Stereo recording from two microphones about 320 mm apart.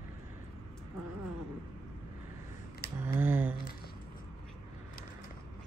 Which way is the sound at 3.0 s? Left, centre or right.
Centre.